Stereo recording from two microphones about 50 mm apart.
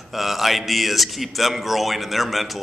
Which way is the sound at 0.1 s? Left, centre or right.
Centre.